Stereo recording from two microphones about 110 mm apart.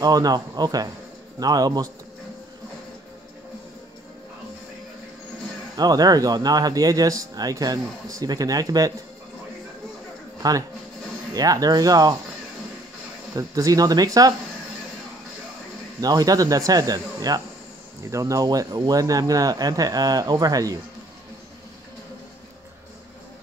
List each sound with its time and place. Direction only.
0.0 s speech: 35° right (ahead or behind)
5.8 s speech: 35° right (ahead or behind)
10.4 s speech: 35° right (ahead or behind)
13.3 s speech: 30° right (ahead or behind)
16.0 s speech: 35° right (ahead or behind)